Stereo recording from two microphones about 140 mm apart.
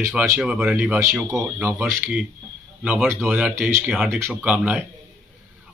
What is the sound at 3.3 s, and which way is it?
Speech, 10° right (ahead or behind).